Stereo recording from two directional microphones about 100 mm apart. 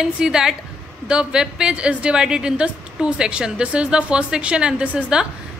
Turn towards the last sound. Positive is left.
turn(degrees=-10)  # may be behind; listen again after turning